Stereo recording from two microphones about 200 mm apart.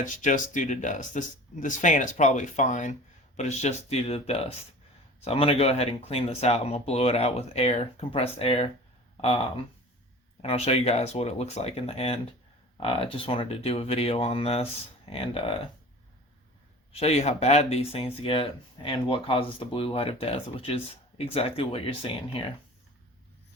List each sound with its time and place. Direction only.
0.0 s speech: 40° left (ahead or behind)
10.4 s speech: 30° left (ahead or behind)
16.9 s speech: 30° left (ahead or behind)